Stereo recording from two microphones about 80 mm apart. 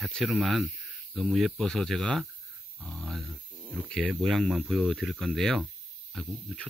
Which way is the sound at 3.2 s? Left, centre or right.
Right.